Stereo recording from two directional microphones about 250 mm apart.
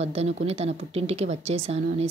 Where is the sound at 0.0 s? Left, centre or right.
Right.